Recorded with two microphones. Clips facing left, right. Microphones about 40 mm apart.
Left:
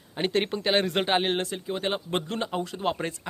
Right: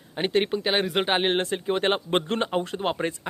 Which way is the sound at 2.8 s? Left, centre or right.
Right.